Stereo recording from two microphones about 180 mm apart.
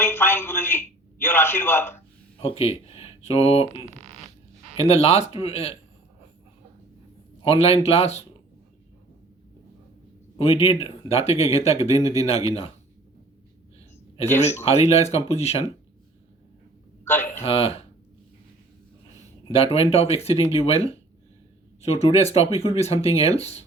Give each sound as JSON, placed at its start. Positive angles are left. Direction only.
{"t": 0.0, "sound": "a man's voice", "side_deg": 10}
{"t": 2.4, "sound": "speech", "side_deg": 35}
{"t": 3.9, "sound": "zipper", "side_deg": -35}
{"t": 4.8, "sound": "speech", "side_deg": 35}
{"t": 7.4, "sound": "speech", "side_deg": 35}
{"t": 10.3, "sound": "speech", "side_deg": 30}
{"t": 14.6, "sound": "speech", "side_deg": 35}
{"t": 17.0, "sound": "a sound", "side_deg": 10}
{"t": 17.4, "sound": "speech", "side_deg": 35}
{"t": 19.5, "sound": "speech", "side_deg": 35}